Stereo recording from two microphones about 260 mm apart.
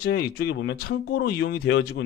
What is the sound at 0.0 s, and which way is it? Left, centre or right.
Speech, left.